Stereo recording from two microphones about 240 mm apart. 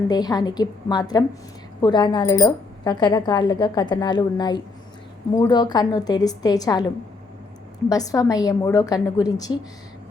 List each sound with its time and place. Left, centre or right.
0.1 s speech: centre